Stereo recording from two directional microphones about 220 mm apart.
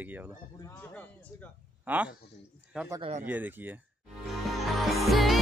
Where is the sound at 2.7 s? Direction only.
5° right (ahead or behind).